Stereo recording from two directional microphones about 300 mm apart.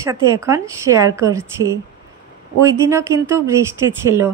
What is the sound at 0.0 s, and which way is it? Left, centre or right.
A woman's voice, centre.